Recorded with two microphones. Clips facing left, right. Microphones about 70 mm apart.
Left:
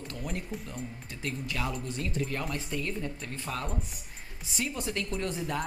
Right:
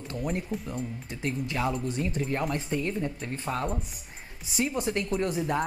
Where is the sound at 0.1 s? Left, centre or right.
Right.